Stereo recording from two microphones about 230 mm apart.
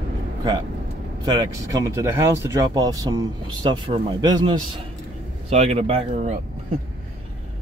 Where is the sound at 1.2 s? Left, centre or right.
Centre.